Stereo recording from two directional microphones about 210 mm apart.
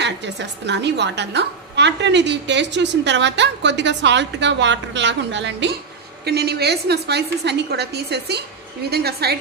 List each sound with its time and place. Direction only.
0.0 s a woman's voice: 55° right (ahead or behind)